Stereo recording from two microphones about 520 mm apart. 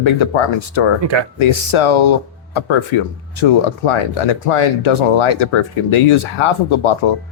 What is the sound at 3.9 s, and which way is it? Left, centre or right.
Speech, left.